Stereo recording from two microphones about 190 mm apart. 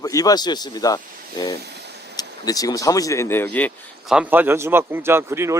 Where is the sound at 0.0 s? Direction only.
20° left (ahead or behind).